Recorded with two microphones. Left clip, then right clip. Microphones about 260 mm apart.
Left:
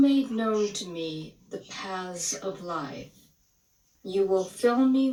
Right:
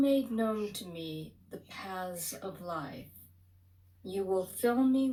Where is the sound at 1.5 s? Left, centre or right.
Right.